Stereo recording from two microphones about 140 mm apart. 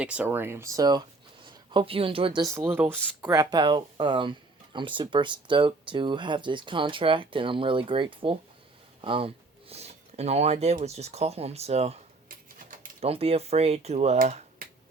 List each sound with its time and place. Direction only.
0.0 s speech: 10° right (ahead or behind); by 1.0 s 25° right (ahead or behind)
1.5 s speech: 40° right (ahead or behind)
2.4 s speech: 20° right (ahead or behind)
3.3 s speech: 30° right (ahead or behind)
9.0 s a sound: 40° right (ahead or behind)
10.8 s speech: 50° right (ahead or behind)
13.0 s speech: 45° right (ahead or behind)